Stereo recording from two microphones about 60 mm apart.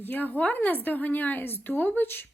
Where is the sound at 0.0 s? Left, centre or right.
Left.